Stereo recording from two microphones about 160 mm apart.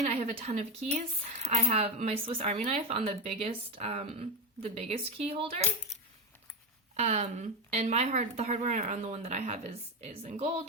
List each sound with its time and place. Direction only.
0.0 s speech: 45° right (ahead or behind)
6.9 s speech: 45° right (ahead or behind)